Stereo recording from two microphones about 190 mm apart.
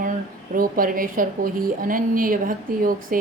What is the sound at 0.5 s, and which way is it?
Speech, 50° right (ahead or behind).